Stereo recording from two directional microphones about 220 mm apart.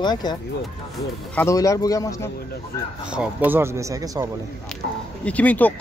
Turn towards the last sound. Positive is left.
turn(degrees=5)  # may be behind; listen again after turning